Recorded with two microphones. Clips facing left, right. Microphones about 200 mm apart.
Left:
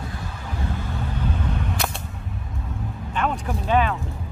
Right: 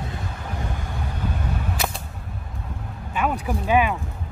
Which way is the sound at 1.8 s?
Centre (ahead or behind).